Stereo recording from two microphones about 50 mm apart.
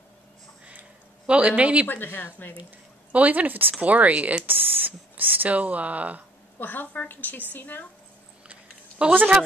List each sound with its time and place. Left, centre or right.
0.7 s a sound: right
1.5 s speech: right
1.9 s a woman's voice: left
3.1 s speech: right
4.5 s speech: right
6.6 s a woman's voice: left
8.5 s a sound: right